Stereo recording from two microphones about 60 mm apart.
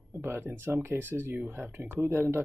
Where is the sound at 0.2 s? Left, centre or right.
Right.